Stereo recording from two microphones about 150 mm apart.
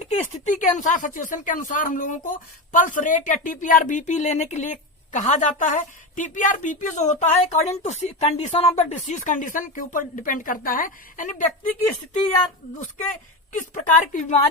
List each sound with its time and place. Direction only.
0.2 s speech: 55° left (ahead or behind)
13.5 s speech: 60° left (ahead or behind)